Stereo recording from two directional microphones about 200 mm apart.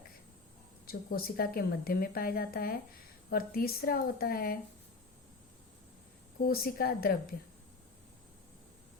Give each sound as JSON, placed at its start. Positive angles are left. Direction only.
{"t": 0.9, "sound": "a woman's voice", "side_deg": 50}
{"t": 6.5, "sound": "a woman's voice", "side_deg": 50}